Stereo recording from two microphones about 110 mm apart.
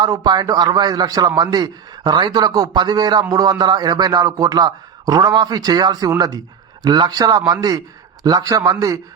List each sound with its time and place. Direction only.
0.0 s speech: 40° right (ahead or behind)